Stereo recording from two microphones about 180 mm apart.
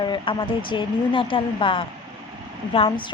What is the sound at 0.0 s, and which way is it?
Speech, 25° left (ahead or behind).